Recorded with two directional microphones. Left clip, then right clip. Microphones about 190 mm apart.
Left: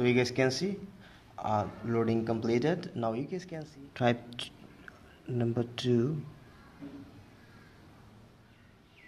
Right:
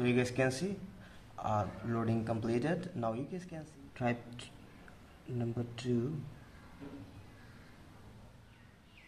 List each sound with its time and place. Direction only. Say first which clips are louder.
0.0 s speech: left 5 dB; 25° left (ahead or behind); by 6.0 s 40° left (ahead or behind)